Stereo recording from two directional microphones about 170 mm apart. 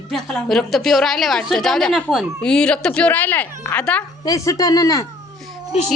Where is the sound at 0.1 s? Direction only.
Centre (ahead or behind).